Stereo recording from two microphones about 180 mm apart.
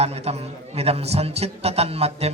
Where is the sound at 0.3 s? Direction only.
35° right (ahead or behind).